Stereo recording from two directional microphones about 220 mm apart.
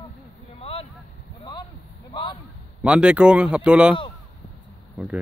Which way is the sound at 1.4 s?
20° left (ahead or behind).